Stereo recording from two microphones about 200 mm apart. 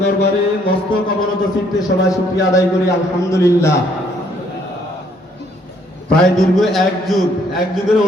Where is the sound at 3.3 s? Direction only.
15° left (ahead or behind).